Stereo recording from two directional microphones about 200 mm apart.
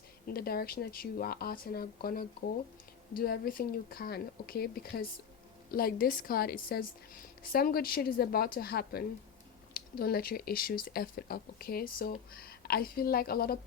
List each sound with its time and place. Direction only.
0.3 s speech: 50° left (ahead or behind)